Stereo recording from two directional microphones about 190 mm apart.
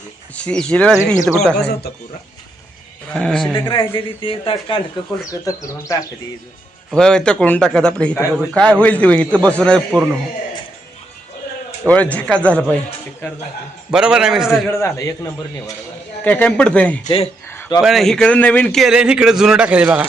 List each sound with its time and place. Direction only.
0.4 s a man's voice: 5° left (ahead or behind)
1.5 s speech: 60° left (ahead or behind)
3.1 s a man's voice: 5° left (ahead or behind)
3.7 s speech: 25° left (ahead or behind)
5.2 s a man's voice: 15° left (ahead or behind)
6.9 s a man's voice: 5° left (ahead or behind)
11.9 s a man's voice: 5° left (ahead or behind)
13.9 s a man's voice: 5° right (ahead or behind)
14.7 s a man's voice: 15° left (ahead or behind)
16.2 s a man's voice: 10° left (ahead or behind)
17.5 s a sound: 10° left (ahead or behind)
17.7 s a man's voice: centre (ahead or behind)